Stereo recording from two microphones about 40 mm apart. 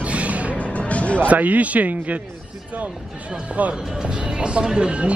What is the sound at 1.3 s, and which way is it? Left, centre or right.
Speech, right.